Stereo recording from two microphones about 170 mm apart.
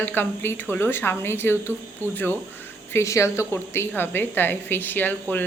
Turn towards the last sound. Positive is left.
turn(degrees=10)  # may be behind; listen again after turning